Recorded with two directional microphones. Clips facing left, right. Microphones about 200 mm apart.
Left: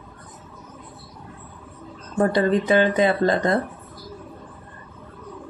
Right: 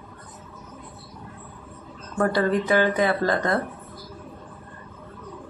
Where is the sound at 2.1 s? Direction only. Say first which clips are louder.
Left 3 dB; 20° left (ahead or behind).